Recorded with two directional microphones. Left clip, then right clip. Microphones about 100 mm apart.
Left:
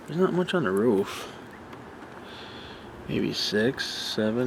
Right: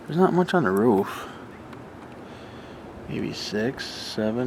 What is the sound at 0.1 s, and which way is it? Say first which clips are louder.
Speech: right 4 dB; 15° right (ahead or behind).